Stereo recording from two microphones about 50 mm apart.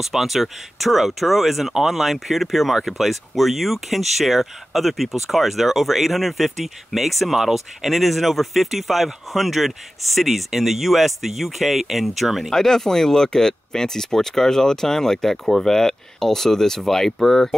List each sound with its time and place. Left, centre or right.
0.0 s speech: centre